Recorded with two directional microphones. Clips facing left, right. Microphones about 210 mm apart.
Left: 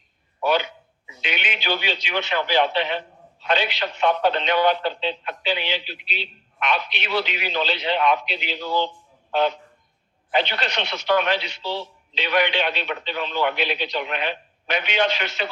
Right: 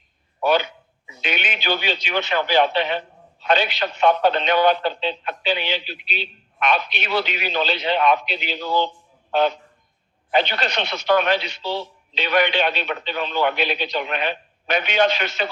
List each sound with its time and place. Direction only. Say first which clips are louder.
0.4 s a sound: right 2 dB; 45° right (ahead or behind)
1.2 s a man's voice: right 2 dB; 45° right (ahead or behind)
10.3 s a man's voice: right 2 dB; 45° right (ahead or behind)